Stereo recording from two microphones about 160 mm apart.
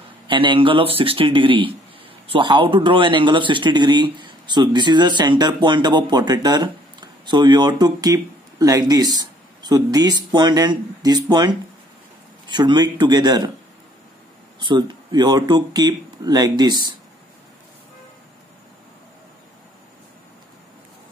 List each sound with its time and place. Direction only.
0.3 s speech: 30° right (ahead or behind)
14.6 s speech: 30° right (ahead or behind)